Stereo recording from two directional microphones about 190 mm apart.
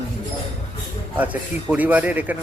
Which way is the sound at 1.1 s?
10° right (ahead or behind).